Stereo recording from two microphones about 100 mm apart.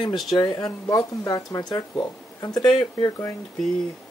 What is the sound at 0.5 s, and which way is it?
Speech, 40° left (ahead or behind).